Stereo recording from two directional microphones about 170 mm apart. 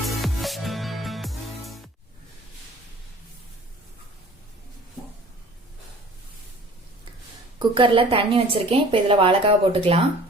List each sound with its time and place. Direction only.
0.0 s music: centre (ahead or behind)
7.7 s a woman's voice: 30° right (ahead or behind)